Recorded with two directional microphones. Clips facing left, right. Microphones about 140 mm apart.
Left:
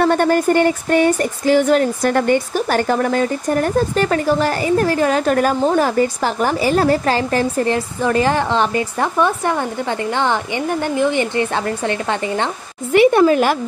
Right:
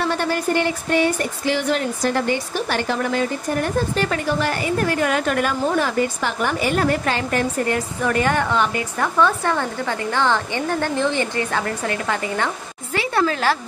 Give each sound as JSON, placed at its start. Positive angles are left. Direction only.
{"t": 0.0, "sound": "speech", "side_deg": 50}